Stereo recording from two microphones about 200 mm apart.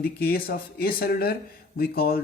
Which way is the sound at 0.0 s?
50° left (ahead or behind).